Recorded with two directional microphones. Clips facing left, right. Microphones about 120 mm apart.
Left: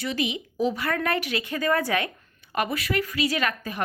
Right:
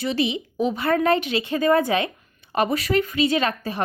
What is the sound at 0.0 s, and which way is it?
A woman's voice, 25° right (ahead or behind).